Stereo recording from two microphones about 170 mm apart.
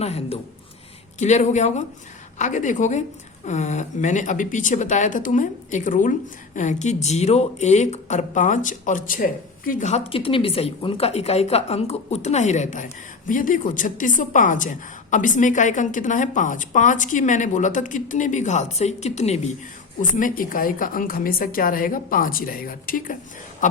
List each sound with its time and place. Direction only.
0.0 s a woman's voice: 40° left (ahead or behind)
20.0 s a woman's voice: 50° left (ahead or behind)